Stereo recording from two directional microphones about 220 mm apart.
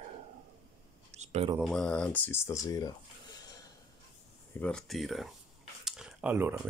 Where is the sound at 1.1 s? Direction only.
30° right (ahead or behind).